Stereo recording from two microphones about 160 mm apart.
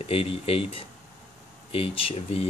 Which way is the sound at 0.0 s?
35° left (ahead or behind).